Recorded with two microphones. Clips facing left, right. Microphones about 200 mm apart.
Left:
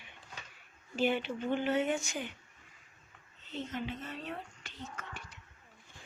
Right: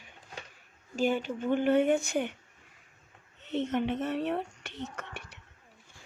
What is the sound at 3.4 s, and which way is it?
Speech, 70° right (ahead or behind).